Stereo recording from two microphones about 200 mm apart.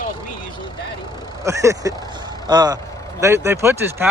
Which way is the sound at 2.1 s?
20° right (ahead or behind).